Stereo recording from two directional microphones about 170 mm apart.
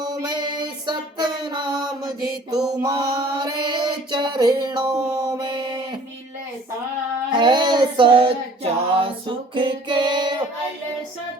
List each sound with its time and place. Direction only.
0.0 s music: 25° right (ahead or behind)
2.8 s music: 25° right (ahead or behind)
4.6 s a sound: 25° right (ahead or behind)
7.3 s female singing: 25° right (ahead or behind)